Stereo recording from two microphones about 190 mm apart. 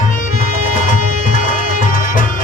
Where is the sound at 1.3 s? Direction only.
45° left (ahead or behind).